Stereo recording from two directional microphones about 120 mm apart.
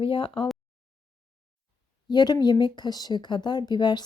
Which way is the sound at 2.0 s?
35° left (ahead or behind).